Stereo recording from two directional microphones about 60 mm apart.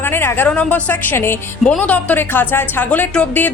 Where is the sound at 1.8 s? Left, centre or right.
Left.